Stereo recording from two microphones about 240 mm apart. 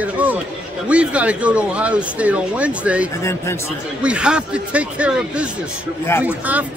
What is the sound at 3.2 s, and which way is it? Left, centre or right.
Speech, centre.